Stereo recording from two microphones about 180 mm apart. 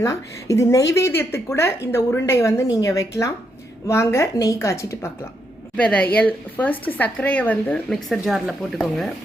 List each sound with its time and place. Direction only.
0.0 s speech: 20° left (ahead or behind); by 9.0 s centre (ahead or behind)